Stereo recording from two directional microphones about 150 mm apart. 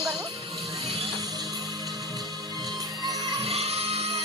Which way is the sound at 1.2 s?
25° right (ahead or behind).